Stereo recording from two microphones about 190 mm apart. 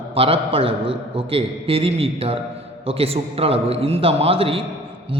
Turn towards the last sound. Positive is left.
turn(degrees=-30)  # may be behind; listen again after turning